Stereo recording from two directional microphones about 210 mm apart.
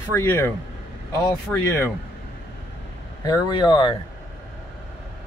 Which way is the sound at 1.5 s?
10° left (ahead or behind).